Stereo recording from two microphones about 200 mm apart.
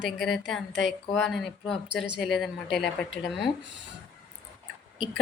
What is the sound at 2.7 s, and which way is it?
Speech, 60° left (ahead or behind).